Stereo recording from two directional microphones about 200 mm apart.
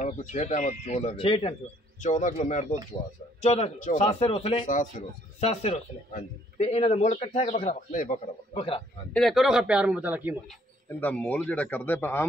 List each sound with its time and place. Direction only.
0.0 s a man's voice: 40° left (ahead or behind)
9.1 s a man's voice: centre (ahead or behind)
10.9 s a man's voice: 10° left (ahead or behind)